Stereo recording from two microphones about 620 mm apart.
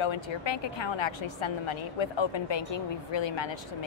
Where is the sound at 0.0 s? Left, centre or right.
Left.